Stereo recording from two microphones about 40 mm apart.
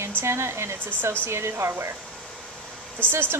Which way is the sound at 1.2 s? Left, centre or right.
Right.